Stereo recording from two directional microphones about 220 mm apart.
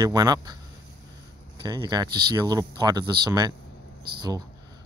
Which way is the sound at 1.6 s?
20° right (ahead or behind).